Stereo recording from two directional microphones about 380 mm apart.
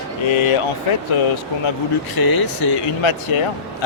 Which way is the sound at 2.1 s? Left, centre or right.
Left.